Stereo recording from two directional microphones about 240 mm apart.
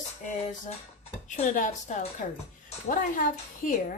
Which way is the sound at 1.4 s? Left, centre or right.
Left.